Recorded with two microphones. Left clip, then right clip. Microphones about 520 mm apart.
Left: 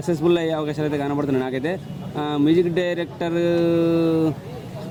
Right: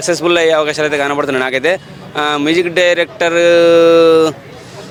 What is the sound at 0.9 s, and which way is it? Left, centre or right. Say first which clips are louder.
Speech: right 9 dB; centre.